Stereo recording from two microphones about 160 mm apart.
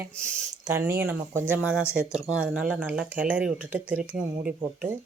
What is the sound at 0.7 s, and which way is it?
Speech, 15° right (ahead or behind).